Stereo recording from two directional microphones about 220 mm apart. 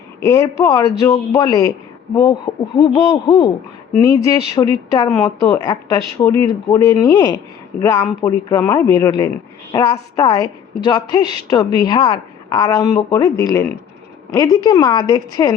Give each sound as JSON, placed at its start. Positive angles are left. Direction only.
{"t": 0.3, "sound": "speech", "side_deg": 15}